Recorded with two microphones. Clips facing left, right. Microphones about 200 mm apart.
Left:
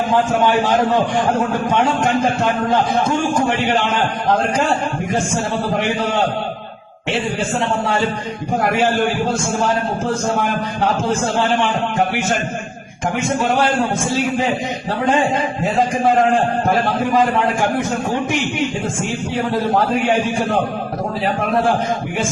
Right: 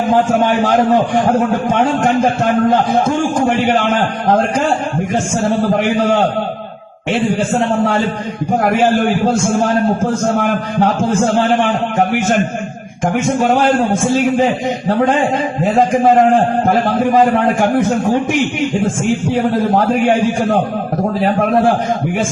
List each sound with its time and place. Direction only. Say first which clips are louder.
1.6 s a man's voice: right 3 dB; 50° right (ahead or behind)
13.4 s a man's voice: right 4 dB; 50° right (ahead or behind)
15.9 s a man's voice: right 5 dB; 50° right (ahead or behind)